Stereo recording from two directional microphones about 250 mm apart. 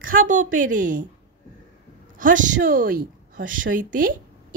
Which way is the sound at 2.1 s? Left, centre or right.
Right.